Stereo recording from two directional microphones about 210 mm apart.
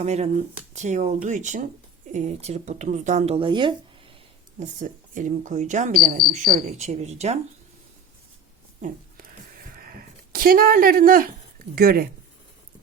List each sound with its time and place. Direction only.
0.0 s speech: 30° right (ahead or behind)
4.6 s speech: 35° right (ahead or behind)
9.8 s speech: 45° right (ahead or behind)